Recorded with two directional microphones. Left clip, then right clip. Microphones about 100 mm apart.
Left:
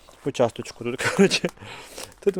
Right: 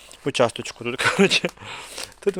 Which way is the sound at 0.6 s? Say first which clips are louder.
Right 4 dB; 45° left (ahead or behind).